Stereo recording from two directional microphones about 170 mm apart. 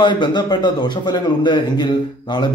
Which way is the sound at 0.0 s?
25° left (ahead or behind).